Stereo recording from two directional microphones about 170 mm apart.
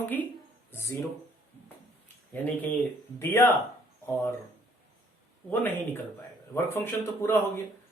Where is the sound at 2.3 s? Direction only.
10° left (ahead or behind).